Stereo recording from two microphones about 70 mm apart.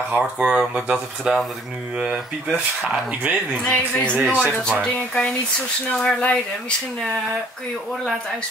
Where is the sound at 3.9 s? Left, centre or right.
Centre.